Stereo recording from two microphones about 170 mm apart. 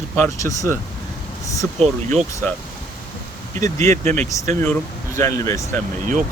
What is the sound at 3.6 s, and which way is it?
Speech, 45° right (ahead or behind).